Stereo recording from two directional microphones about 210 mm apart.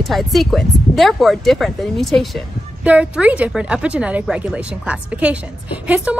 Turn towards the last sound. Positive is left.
turn(degrees=-5)  # may be behind; listen again after turning